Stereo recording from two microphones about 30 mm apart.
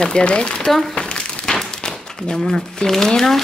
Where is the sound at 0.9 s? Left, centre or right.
Left.